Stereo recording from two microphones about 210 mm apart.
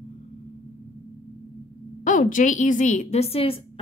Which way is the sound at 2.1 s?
40° left (ahead or behind).